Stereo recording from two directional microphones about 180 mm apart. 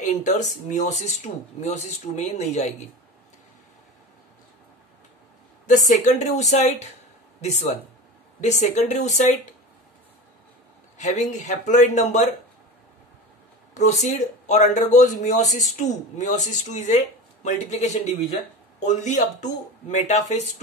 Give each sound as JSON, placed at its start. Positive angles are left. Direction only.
{"t": 0.0, "sound": "speech", "side_deg": 45}
{"t": 5.7, "sound": "speech", "side_deg": 45}
{"t": 11.0, "sound": "speech", "side_deg": 40}
{"t": 13.7, "sound": "speech", "side_deg": 40}